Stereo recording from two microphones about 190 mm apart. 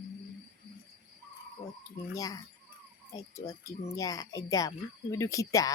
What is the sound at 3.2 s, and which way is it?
Speech, 20° left (ahead or behind).